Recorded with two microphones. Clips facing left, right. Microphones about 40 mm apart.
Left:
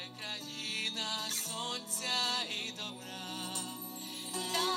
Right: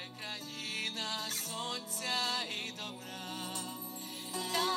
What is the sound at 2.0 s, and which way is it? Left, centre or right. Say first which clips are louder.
Music: even; left.